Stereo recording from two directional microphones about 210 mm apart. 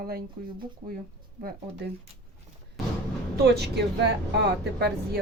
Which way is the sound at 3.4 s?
50° right (ahead or behind).